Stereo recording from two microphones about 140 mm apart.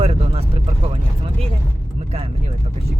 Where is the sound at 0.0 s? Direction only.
45° right (ahead or behind).